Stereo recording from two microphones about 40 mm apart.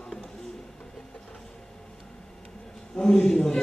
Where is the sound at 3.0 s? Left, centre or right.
Centre.